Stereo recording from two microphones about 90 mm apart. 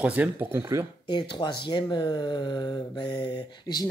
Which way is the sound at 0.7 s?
30° right (ahead or behind).